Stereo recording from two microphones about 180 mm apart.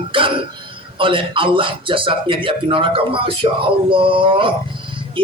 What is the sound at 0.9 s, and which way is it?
A man's voice, 30° right (ahead or behind).